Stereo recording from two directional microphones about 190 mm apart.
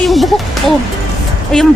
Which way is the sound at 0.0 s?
Centre (ahead or behind).